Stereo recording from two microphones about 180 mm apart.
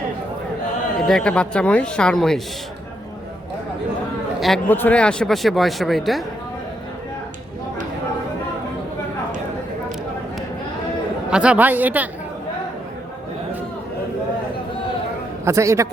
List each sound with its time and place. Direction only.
1.0 s speech: 5° left (ahead or behind)
4.4 s speech: centre (ahead or behind)
11.3 s a woman's voice: 5° right (ahead or behind)
15.4 s a woman's voice: 15° right (ahead or behind)